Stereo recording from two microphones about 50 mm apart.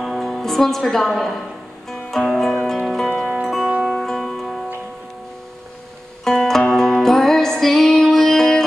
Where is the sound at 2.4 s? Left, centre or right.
Centre.